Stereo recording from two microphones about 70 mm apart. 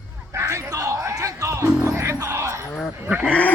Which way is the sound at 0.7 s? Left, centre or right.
Right.